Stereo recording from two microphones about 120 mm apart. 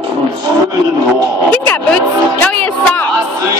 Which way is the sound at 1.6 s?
10° left (ahead or behind).